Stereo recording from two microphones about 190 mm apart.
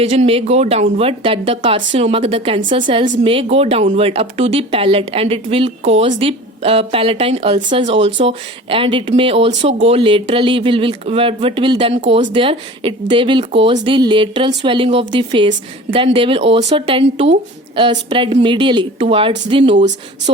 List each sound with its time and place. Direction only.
0.0 s speech: 30° right (ahead or behind)